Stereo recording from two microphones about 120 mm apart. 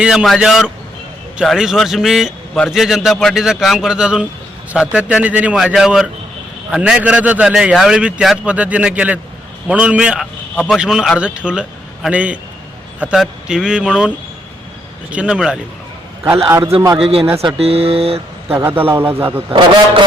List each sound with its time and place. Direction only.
0.0 s a man's voice: 5° right (ahead or behind)
10.5 s a man's voice: 5° left (ahead or behind)
10.8 s a man's voice: 5° right (ahead or behind)
15.1 s a man's voice: 10° right (ahead or behind)
16.5 s a man's voice: 25° right (ahead or behind)
17.0 s speech: 50° right (ahead or behind)
18.5 s a man's voice: 15° right (ahead or behind)